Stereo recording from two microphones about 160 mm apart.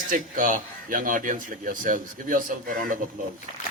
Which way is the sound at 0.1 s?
55° right (ahead or behind).